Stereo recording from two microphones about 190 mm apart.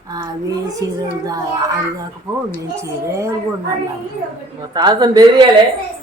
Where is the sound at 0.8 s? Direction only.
20° right (ahead or behind).